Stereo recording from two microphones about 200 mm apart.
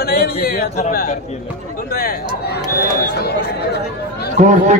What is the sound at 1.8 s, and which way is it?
Speech, 50° left (ahead or behind).